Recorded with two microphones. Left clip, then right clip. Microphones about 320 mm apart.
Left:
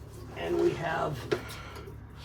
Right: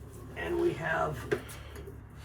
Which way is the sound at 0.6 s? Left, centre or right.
Left.